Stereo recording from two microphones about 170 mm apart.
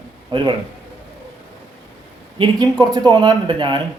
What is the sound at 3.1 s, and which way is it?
Speech, 25° right (ahead or behind).